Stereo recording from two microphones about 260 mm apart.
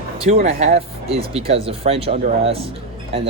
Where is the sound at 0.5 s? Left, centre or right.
Right.